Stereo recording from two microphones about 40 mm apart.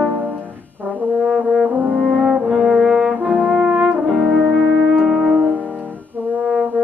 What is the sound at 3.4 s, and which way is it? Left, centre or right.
French horn, centre.